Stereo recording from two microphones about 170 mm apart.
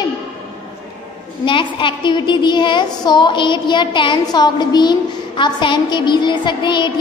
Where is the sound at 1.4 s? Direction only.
30° left (ahead or behind).